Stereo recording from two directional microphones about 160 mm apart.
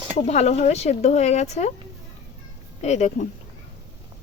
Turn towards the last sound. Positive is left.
turn(degrees=45)  # may be behind; listen again after turning